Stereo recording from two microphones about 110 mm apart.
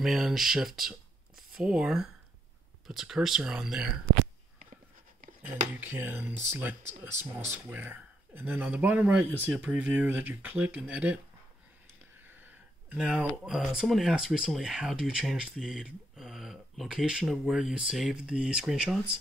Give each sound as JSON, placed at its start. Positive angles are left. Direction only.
{"t": 0.0, "sound": "speech", "side_deg": 0}
{"t": 5.7, "sound": "speech", "side_deg": -20}
{"t": 12.2, "sound": "speech", "side_deg": -15}